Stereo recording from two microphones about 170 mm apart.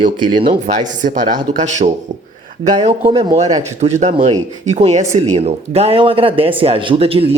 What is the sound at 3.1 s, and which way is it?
Speech, 35° right (ahead or behind).